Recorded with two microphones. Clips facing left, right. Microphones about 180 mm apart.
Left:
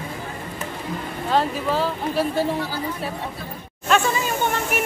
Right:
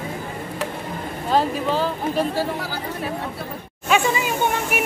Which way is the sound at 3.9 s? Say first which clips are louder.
Right 1 dB; 10° right (ahead or behind).